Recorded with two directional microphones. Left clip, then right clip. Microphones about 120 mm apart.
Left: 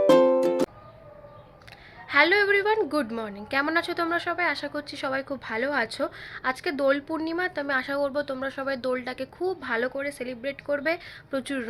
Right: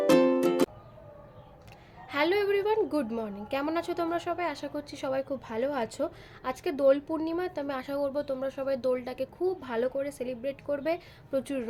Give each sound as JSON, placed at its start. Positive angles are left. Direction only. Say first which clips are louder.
{"t": 2.0, "sound": "a woman's voice", "louder": "left 7 dB", "side_deg": -25}